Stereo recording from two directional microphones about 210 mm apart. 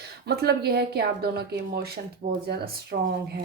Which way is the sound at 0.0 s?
50° right (ahead or behind).